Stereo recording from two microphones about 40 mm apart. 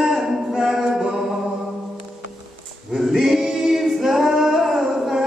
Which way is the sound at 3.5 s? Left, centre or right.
Centre.